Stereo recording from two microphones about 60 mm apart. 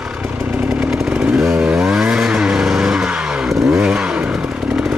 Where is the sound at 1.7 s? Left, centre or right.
Centre.